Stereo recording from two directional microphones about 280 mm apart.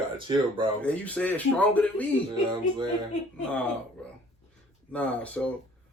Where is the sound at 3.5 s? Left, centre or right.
Centre.